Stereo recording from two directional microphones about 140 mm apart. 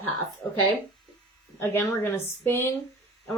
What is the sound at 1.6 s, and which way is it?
A woman's voice, 15° left (ahead or behind).